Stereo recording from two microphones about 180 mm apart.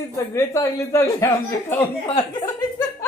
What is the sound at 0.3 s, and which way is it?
Speech, 15° left (ahead or behind).